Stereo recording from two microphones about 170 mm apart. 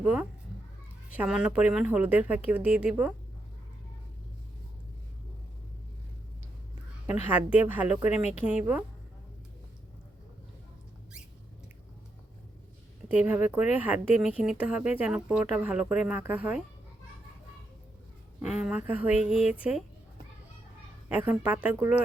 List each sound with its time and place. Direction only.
0.0 s speech: 10° right (ahead or behind)
7.1 s speech: 10° right (ahead or behind)
8.4 s a woman's voice: 10° left (ahead or behind)
13.1 s speech: 10° right (ahead or behind)
18.4 s speech: 5° right (ahead or behind)
19.2 s speech: 45° right (ahead or behind)
19.5 s speech: 5° right (ahead or behind)
21.2 s speech: 10° right (ahead or behind)